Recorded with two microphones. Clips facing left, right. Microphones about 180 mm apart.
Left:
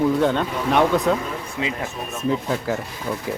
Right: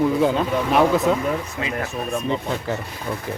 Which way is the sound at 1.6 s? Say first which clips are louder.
Even; 20° left (ahead or behind).